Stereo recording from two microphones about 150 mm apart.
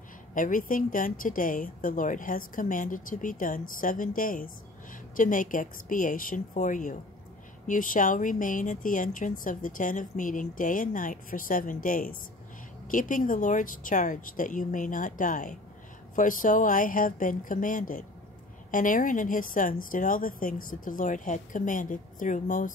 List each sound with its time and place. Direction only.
0.3 s speech: 60° left (ahead or behind)